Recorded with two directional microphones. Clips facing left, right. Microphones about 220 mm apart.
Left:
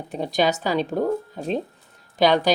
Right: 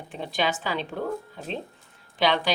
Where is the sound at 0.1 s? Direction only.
40° left (ahead or behind).